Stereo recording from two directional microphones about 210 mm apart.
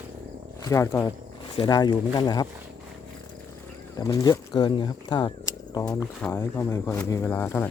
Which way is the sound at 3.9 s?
15° left (ahead or behind).